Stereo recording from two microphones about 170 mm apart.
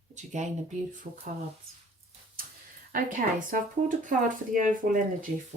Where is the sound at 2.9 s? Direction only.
55° right (ahead or behind).